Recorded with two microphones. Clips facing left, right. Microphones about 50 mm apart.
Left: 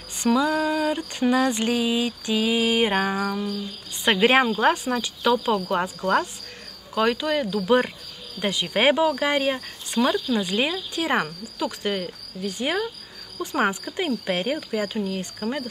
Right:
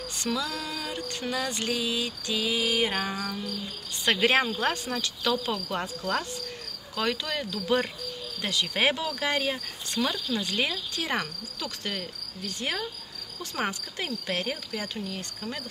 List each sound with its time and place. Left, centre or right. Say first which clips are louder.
0.2 s speech: left 11 dB; left